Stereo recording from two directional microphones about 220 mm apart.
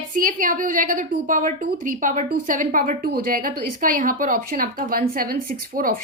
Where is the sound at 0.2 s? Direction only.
40° right (ahead or behind).